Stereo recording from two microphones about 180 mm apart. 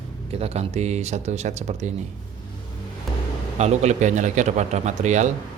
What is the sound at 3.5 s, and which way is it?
Speech, 40° right (ahead or behind).